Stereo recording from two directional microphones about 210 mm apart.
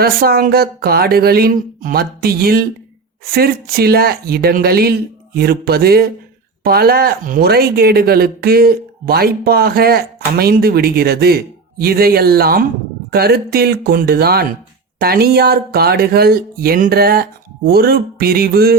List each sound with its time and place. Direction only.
0.0 s speech: 45° right (ahead or behind)